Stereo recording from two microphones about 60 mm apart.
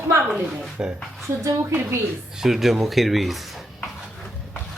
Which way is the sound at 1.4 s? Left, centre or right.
Right.